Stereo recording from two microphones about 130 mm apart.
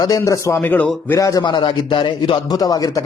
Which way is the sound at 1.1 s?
25° left (ahead or behind).